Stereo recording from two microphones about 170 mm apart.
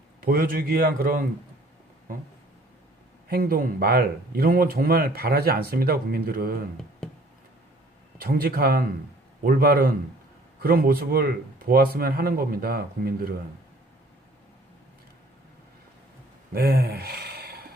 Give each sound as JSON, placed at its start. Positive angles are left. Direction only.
{"t": 0.2, "sound": "speech", "side_deg": -60}
{"t": 3.2, "sound": "speech", "side_deg": -60}
{"t": 8.2, "sound": "speech", "side_deg": -60}
{"t": 16.5, "sound": "a sound", "side_deg": -65}